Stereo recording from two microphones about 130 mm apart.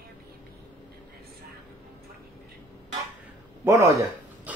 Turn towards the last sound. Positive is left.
turn(degrees=-10)  # may be behind; listen again after turning